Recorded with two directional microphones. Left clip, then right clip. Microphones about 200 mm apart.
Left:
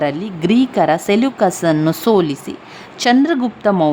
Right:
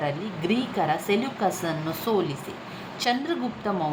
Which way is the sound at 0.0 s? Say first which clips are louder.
Left 10 dB; 55° left (ahead or behind).